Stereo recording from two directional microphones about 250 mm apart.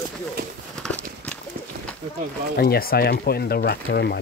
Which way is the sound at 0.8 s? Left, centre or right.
Centre.